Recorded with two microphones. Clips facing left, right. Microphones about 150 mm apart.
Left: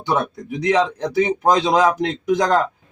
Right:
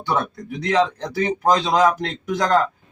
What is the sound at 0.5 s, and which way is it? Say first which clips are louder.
A man's voice: left 1 dB; 15° left (ahead or behind).